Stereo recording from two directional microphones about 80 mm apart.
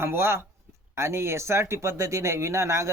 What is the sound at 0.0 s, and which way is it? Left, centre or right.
Speech, right.